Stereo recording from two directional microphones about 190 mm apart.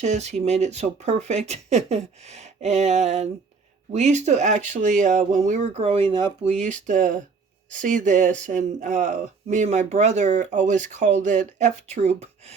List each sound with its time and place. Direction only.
0.0 s speech: 35° right (ahead or behind)
6.4 s speech: 40° right (ahead or behind)